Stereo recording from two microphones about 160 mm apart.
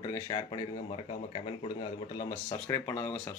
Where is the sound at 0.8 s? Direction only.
35° left (ahead or behind).